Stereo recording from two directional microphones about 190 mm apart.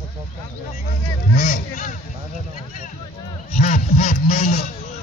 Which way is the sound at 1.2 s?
50° left (ahead or behind).